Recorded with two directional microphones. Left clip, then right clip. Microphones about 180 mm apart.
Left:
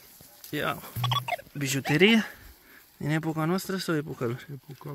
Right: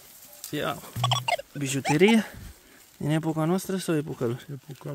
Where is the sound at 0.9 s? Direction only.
75° right (ahead or behind).